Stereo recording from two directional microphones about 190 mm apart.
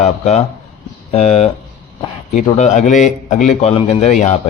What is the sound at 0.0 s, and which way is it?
A man's voice, 35° left (ahead or behind).